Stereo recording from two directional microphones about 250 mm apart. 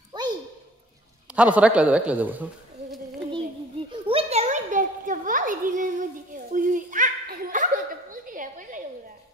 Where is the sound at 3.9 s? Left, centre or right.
Right.